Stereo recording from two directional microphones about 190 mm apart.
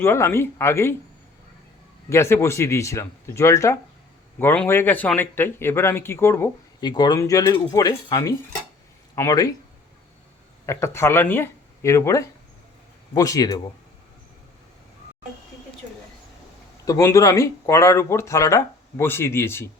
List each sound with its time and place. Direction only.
0.0 s a man's voice: 15° left (ahead or behind)
2.0 s a man's voice: 15° left (ahead or behind)
10.7 s a man's voice: 15° left (ahead or behind)
16.8 s a man's voice: 15° left (ahead or behind)